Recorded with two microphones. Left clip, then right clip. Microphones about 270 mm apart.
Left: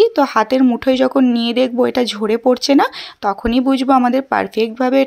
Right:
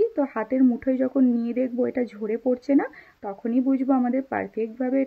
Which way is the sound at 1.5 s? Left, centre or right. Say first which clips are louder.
Left 11 dB; left.